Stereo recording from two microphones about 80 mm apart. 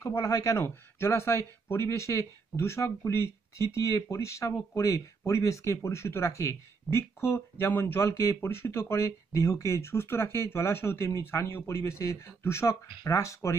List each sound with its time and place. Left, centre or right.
0.0 s speech: left
0.7 s speech: left